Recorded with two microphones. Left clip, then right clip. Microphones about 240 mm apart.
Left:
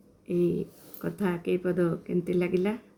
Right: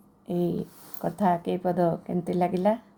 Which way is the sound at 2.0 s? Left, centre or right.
Right.